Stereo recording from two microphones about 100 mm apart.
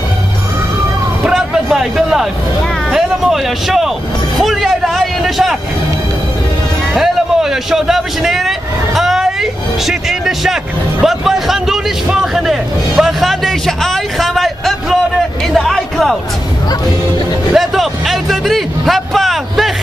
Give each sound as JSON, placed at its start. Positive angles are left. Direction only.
{"t": 1.2, "sound": "music", "side_deg": -5}
{"t": 2.9, "sound": "speech", "side_deg": -5}
{"t": 4.4, "sound": "a sound", "side_deg": 0}
{"t": 6.9, "sound": "a man's voice", "side_deg": -5}
{"t": 17.6, "sound": "a man's voice", "side_deg": 0}